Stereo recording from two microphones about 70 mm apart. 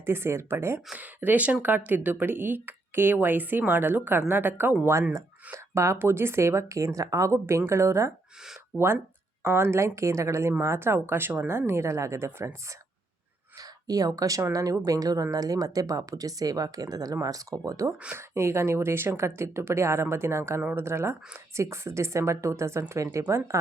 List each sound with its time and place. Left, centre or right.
0.0 s a woman's voice: right
0.9 s speech: right
5.7 s a woman's voice: right
9.4 s a woman's voice: right
13.6 s speech: right
18.2 s a woman's voice: right